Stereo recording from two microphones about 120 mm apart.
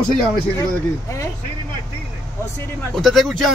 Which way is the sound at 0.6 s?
25° left (ahead or behind).